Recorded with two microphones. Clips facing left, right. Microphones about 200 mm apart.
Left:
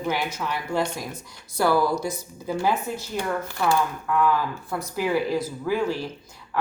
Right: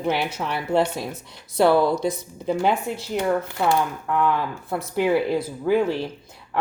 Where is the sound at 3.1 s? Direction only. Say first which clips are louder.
Right 6 dB; 25° right (ahead or behind).